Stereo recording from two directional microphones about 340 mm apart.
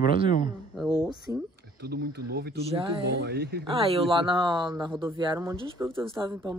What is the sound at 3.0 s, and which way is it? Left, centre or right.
Speech, right.